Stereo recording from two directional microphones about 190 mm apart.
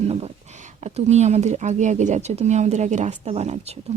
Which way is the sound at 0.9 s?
35° right (ahead or behind).